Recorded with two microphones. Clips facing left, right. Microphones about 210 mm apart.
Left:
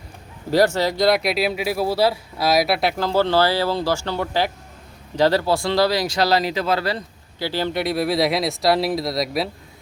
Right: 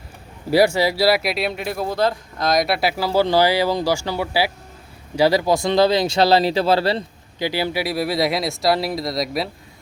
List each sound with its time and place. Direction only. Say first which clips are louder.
0.5 s speech: right 1 dB; 10° right (ahead or behind); by 7.0 s 30° right (ahead or behind)
7.3 s speech: right 1 dB; 15° right (ahead or behind)